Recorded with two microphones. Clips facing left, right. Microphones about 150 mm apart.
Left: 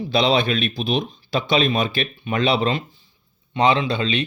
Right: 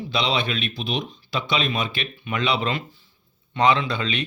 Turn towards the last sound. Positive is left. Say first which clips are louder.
# left 4 dB
turn(degrees=25)  # may be behind; listen again after turning